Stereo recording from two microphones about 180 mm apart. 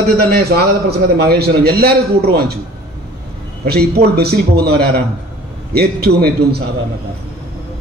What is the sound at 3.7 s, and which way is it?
A man's voice, 60° right (ahead or behind).